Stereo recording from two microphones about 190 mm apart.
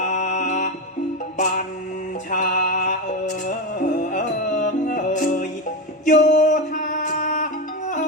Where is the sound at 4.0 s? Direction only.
45° left (ahead or behind).